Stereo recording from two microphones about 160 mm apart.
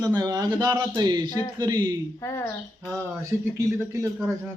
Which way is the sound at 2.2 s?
20° left (ahead or behind).